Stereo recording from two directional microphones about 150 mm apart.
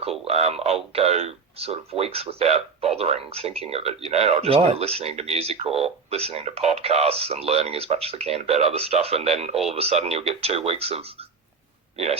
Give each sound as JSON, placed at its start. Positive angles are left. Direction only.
{"t": 0.0, "sound": "speech", "side_deg": -45}